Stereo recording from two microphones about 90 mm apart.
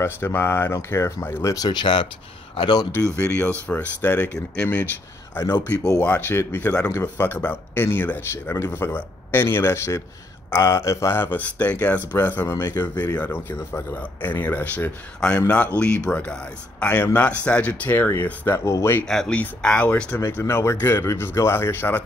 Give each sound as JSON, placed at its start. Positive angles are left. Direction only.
{"t": 0.0, "sound": "speech", "side_deg": 30}
{"t": 3.2, "sound": "speech", "side_deg": 15}
{"t": 6.9, "sound": "speech", "side_deg": 30}
{"t": 7.3, "sound": "speech", "side_deg": 20}
{"t": 19.0, "sound": "speech", "side_deg": 5}
{"t": 20.4, "sound": "speech", "side_deg": 30}